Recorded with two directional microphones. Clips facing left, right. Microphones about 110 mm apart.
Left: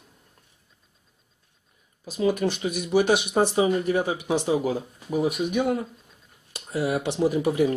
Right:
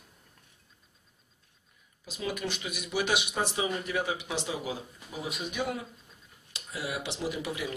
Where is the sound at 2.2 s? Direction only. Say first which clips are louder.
Left 11 dB; 40° left (ahead or behind).